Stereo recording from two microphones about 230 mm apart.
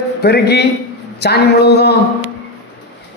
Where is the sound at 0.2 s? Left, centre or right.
Left.